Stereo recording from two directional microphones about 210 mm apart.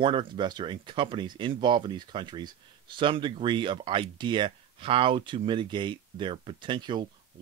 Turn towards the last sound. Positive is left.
turn(degrees=-20)  # may be behind; listen again after turning